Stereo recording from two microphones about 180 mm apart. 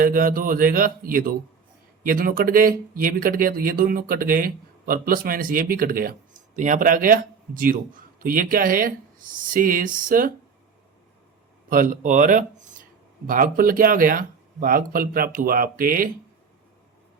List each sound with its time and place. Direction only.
0.0 s speech: 50° right (ahead or behind)
11.7 s speech: 50° right (ahead or behind)